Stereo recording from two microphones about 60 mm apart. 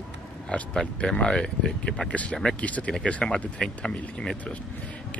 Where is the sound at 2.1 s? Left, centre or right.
Left.